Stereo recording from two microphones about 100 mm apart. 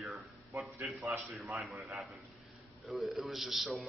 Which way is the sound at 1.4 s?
Centre (ahead or behind).